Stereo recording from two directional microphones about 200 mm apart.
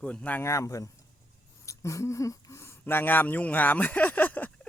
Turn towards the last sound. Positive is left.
turn(degrees=10)  # may be behind; listen again after turning